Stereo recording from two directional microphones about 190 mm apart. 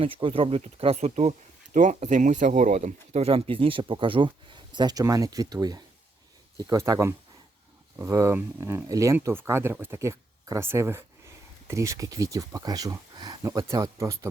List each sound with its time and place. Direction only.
0.0 s speech: 30° right (ahead or behind)